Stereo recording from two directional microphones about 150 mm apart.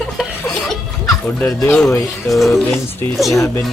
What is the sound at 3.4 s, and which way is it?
Speech, 15° left (ahead or behind).